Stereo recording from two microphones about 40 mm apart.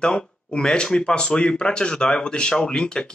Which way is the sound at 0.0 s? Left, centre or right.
Centre.